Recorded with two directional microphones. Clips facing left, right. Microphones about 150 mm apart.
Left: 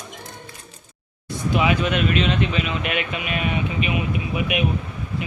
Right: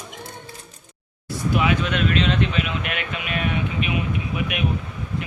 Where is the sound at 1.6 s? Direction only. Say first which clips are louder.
Left 3 dB; 5° left (ahead or behind).